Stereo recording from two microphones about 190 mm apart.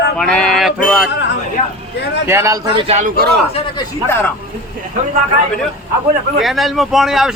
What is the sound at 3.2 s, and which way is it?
Speech, 60° right (ahead or behind).